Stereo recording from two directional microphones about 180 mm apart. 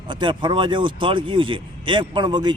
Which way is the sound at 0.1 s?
25° right (ahead or behind).